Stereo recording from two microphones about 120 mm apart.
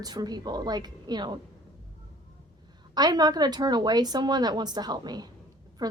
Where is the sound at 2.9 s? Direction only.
35° right (ahead or behind).